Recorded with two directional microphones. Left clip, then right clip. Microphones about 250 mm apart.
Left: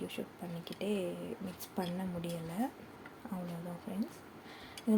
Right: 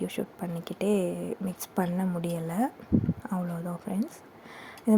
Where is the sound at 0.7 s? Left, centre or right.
Right.